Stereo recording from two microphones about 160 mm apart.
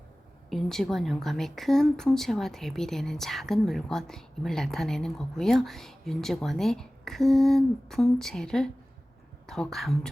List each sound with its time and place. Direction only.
0.5 s speech: centre (ahead or behind)
9.7 s speech: centre (ahead or behind)